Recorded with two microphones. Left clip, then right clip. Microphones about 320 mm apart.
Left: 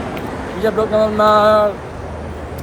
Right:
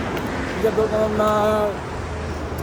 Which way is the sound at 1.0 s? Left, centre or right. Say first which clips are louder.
Left 10 dB; left.